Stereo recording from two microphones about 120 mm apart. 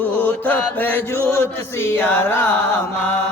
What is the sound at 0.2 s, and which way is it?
Mantra, 10° left (ahead or behind).